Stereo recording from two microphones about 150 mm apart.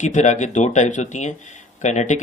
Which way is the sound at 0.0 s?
50° left (ahead or behind).